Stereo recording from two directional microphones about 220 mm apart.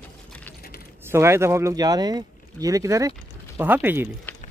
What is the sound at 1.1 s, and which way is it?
Speech, 10° right (ahead or behind).